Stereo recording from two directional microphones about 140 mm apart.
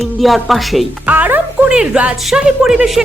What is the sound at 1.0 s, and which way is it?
A woman's voice, 10° right (ahead or behind).